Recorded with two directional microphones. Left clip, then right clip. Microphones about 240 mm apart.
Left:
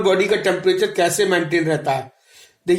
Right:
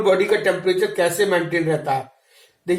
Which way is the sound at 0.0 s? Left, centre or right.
Left.